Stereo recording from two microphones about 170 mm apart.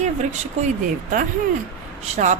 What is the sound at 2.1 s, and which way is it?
Speech, 45° right (ahead or behind).